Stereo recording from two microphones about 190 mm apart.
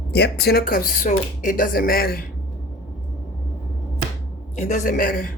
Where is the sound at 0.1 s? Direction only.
60° left (ahead or behind).